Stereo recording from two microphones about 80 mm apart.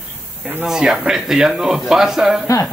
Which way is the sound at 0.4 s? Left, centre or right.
Centre.